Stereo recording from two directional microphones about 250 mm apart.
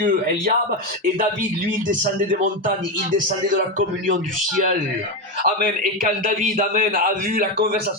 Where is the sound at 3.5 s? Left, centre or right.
Right.